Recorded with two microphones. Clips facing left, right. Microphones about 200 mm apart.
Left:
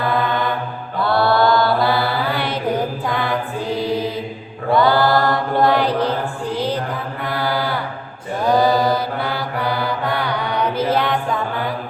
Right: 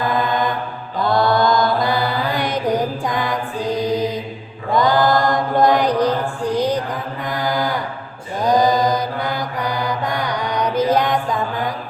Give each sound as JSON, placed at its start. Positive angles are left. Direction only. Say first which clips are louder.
{"t": 0.9, "sound": "mantra", "louder": "even", "side_deg": -15}
{"t": 6.1, "sound": "music", "louder": "right 3 dB", "side_deg": -15}
{"t": 8.4, "sound": "mantra", "louder": "even", "side_deg": -15}